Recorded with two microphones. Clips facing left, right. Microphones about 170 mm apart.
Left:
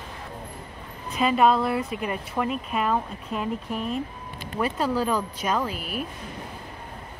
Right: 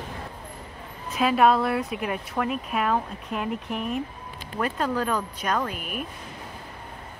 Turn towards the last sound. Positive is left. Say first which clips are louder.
# left 1 dB
turn(degrees=35)  # may be behind; listen again after turning